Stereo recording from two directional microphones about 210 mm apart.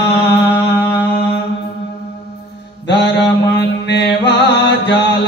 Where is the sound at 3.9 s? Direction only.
55° left (ahead or behind).